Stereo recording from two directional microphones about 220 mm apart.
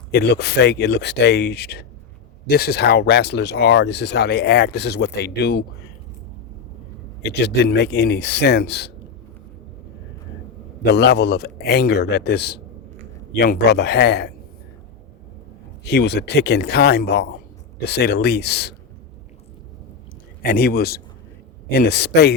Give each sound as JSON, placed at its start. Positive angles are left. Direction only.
{"t": 0.1, "sound": "speech", "side_deg": 50}
{"t": 7.2, "sound": "speech", "side_deg": 50}
{"t": 10.9, "sound": "speech", "side_deg": 50}
{"t": 15.8, "sound": "speech", "side_deg": 50}
{"t": 20.4, "sound": "speech", "side_deg": 40}